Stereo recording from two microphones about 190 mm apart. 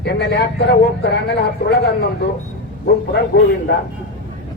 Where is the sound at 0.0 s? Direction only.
65° left (ahead or behind).